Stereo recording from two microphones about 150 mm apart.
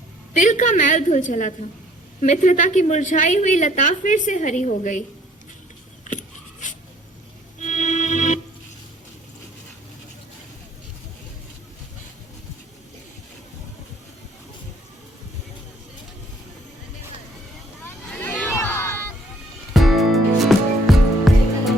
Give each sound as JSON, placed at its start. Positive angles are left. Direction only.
{"t": 0.3, "sound": "a woman's voice", "side_deg": 55}
{"t": 6.1, "sound": "a sound", "side_deg": 60}
{"t": 7.6, "sound": "music", "side_deg": 55}
{"t": 18.0, "sound": "chatter", "side_deg": 10}
{"t": 19.7, "sound": "music", "side_deg": 0}